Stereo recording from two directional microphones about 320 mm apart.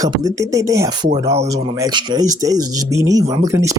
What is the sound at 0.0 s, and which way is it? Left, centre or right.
Speech, centre.